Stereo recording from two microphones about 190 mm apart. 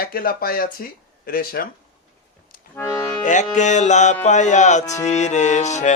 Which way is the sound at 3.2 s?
40° left (ahead or behind).